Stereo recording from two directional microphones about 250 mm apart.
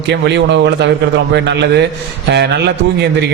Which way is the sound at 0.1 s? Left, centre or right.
Right.